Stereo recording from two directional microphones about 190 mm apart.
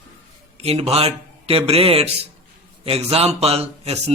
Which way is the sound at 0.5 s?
30° right (ahead or behind).